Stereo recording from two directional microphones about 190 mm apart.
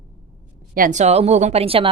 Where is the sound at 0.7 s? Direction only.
45° right (ahead or behind).